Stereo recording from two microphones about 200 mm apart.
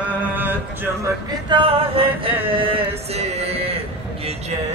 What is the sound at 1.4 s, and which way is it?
Speech, 25° right (ahead or behind).